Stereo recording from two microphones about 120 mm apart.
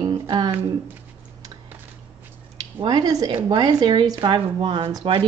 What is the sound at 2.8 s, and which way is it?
Speech, 40° right (ahead or behind).